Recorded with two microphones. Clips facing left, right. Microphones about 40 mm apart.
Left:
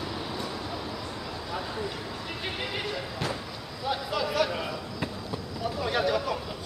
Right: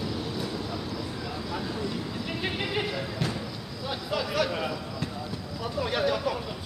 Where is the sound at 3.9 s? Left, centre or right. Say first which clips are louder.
Left 2 dB; centre.